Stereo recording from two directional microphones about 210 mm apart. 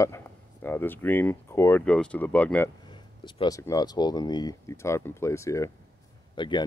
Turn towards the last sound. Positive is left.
turn(degrees=20)  # may be behind; listen again after turning